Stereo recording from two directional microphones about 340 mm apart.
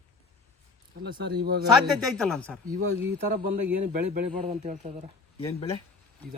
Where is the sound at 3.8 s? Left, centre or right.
Right.